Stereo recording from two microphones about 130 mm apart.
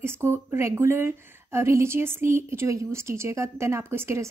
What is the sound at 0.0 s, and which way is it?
A woman's voice, 20° right (ahead or behind).